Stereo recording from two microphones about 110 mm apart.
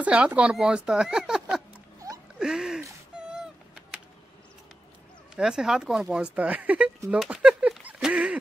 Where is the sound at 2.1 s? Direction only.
30° right (ahead or behind).